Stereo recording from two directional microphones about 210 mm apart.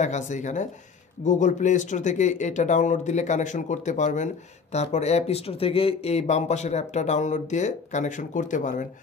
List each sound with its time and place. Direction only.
0.0 s speech: 35° left (ahead or behind)